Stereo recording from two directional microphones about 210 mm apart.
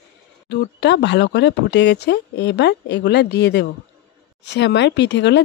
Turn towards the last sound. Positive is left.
turn(degrees=55)  # may be behind; listen again after turning